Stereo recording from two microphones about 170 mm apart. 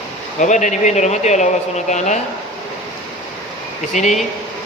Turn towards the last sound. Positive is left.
turn(degrees=45)  # may be behind; listen again after turning